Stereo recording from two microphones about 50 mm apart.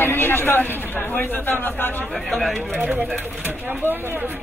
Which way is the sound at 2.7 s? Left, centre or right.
Right.